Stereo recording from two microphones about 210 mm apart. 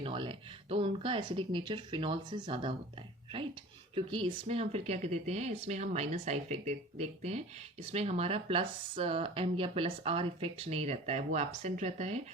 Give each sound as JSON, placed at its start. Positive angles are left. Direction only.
{"t": 0.0, "sound": "speech", "side_deg": -25}
{"t": 3.9, "sound": "speech", "side_deg": -25}